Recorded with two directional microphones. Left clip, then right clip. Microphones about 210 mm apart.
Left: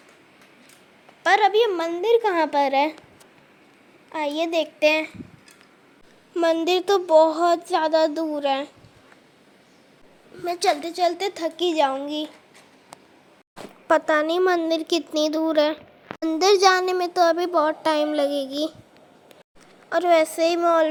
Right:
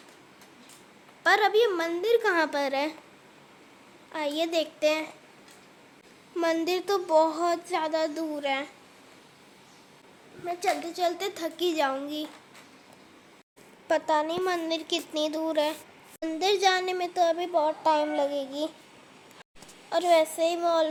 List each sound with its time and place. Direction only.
1.2 s a woman's voice: 10° left (ahead or behind)
4.1 s a woman's voice: 15° left (ahead or behind)
4.8 s child singing: 25° left (ahead or behind)
6.3 s child singing: 15° left (ahead or behind)
10.4 s a woman's voice: 55° left (ahead or behind)
10.9 s child singing: 30° left (ahead or behind)
13.8 s a child's voice: 25° left (ahead or behind)
19.9 s child singing: 20° left (ahead or behind)